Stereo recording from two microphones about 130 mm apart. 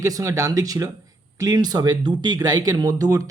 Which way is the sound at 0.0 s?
25° right (ahead or behind).